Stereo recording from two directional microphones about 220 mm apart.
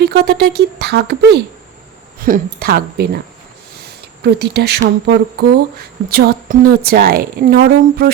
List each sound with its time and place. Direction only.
0.0 s speech: 45° right (ahead or behind)
3.8 s a sound: 50° right (ahead or behind)
5.0 s speech: 45° right (ahead or behind)